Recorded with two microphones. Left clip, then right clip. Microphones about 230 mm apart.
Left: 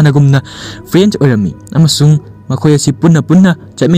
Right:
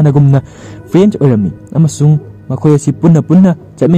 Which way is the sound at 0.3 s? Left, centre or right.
Centre.